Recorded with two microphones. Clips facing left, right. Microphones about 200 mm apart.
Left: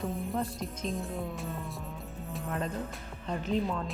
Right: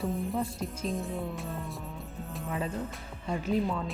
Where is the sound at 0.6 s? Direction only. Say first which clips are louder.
Right 2 dB; centre (ahead or behind).